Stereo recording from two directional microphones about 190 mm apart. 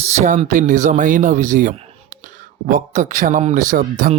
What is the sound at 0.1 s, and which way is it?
A man's voice, 35° right (ahead or behind).